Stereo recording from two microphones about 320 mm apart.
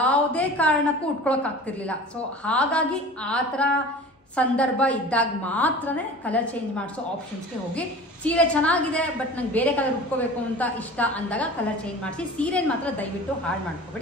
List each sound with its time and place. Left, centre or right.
0.0 s a woman's voice: centre
7.7 s a woman's voice: centre